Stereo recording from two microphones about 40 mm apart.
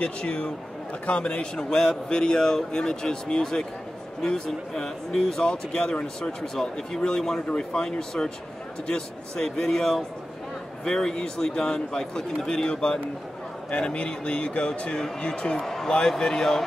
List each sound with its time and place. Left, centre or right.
0.0 s a man's voice: left
1.6 s a man's voice: centre
15.6 s a man's voice: centre
15.9 s a man's voice: centre